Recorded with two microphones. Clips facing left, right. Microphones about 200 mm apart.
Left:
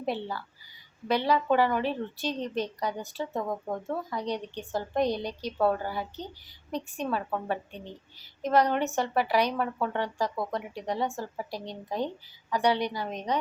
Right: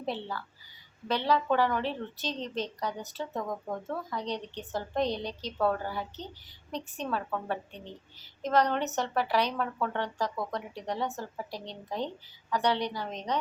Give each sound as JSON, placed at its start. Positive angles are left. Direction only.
{"t": 0.0, "sound": "a woman's voice", "side_deg": 10}